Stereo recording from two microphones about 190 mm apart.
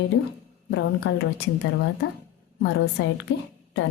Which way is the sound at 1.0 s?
75° left (ahead or behind).